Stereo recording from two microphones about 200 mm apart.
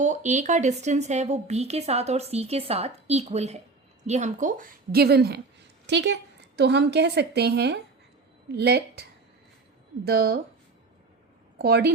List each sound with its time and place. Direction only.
0.0 s a woman's voice: 35° right (ahead or behind)
11.5 s speech: 50° right (ahead or behind)